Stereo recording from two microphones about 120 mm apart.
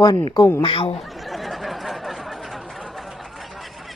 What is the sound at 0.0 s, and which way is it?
Speech, 35° left (ahead or behind).